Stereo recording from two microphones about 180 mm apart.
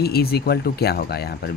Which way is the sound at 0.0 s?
60° left (ahead or behind).